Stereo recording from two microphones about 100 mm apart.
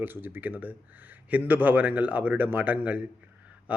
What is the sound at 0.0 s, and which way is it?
Speech, 20° right (ahead or behind).